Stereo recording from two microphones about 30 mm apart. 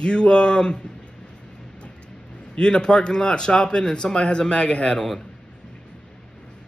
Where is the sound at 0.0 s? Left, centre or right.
Left.